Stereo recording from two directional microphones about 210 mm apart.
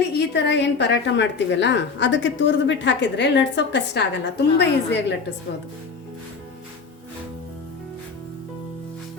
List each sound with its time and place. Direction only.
0.4 s a woman's voice: 55° left (ahead or behind)